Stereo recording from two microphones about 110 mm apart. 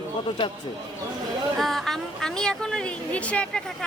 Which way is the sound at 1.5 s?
Centre (ahead or behind).